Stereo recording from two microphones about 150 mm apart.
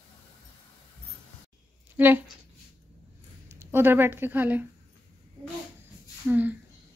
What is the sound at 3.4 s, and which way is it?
Speech, 15° right (ahead or behind).